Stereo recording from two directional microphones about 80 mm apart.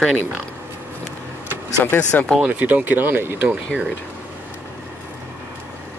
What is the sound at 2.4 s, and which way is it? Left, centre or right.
Speech, centre.